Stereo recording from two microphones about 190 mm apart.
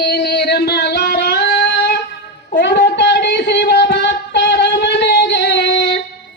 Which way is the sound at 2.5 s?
65° left (ahead or behind).